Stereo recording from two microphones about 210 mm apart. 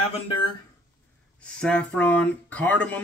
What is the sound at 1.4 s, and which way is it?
Speech, 5° left (ahead or behind).